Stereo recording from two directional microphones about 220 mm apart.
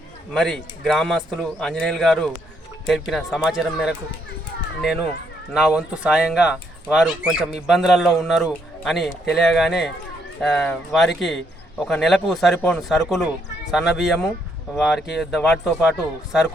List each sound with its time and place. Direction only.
0.3 s speech: centre (ahead or behind)
5.5 s speech: 5° right (ahead or behind)